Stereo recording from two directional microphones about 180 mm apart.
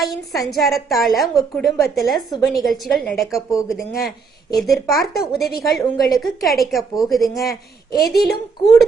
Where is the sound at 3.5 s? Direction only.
15° left (ahead or behind).